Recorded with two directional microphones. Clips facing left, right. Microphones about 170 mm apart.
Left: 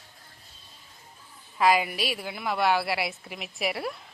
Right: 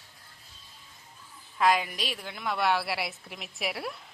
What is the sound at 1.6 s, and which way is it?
A woman's voice, 5° left (ahead or behind).